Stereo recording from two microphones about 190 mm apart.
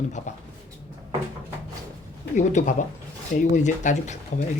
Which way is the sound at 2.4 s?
40° left (ahead or behind).